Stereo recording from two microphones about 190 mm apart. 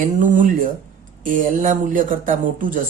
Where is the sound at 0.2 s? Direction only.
40° right (ahead or behind).